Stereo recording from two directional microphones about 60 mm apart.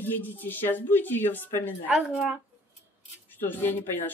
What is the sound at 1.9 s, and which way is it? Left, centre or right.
Speech, centre.